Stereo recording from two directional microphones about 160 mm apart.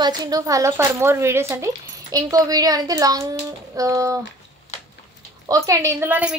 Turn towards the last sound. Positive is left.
turn(degrees=-10)  # may be behind; listen again after turning